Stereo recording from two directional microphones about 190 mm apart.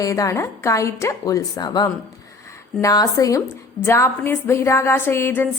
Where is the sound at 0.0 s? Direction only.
15° left (ahead or behind).